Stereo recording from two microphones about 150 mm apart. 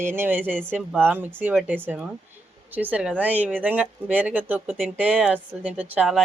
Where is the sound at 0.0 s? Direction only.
15° right (ahead or behind).